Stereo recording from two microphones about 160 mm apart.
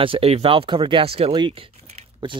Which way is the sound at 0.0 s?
35° right (ahead or behind).